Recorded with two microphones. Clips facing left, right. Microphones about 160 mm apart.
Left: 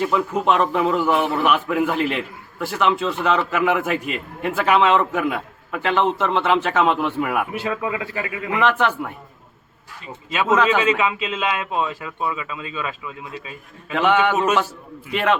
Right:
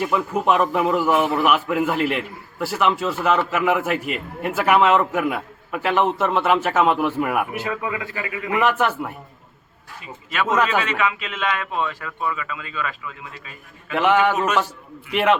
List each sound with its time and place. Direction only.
0.0 s a man's voice: 10° right (ahead or behind)
7.6 s a man's voice: 25° left (ahead or behind)
8.5 s a man's voice: 10° right (ahead or behind)
10.8 s a man's voice: 25° left (ahead or behind)
13.9 s a man's voice: 10° right (ahead or behind)